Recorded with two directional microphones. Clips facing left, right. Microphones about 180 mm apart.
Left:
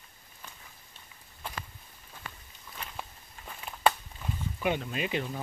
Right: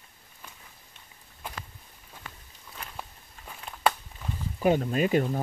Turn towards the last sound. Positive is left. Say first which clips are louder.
# right 8 dB
turn(degrees=-45)  # may be behind; listen again after turning